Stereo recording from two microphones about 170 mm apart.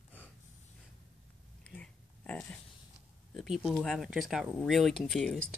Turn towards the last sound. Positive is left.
turn(degrees=0)  # may be behind; listen again after turning